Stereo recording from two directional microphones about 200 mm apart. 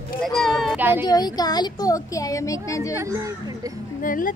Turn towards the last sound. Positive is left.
turn(degrees=45)  # may be behind; listen again after turning